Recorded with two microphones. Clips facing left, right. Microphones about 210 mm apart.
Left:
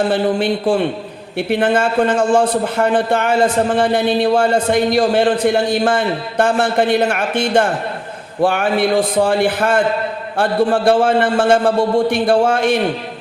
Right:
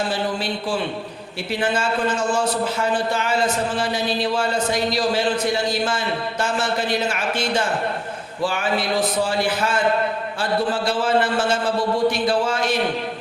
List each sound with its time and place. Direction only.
0.6 s a man's voice: 45° left (ahead or behind)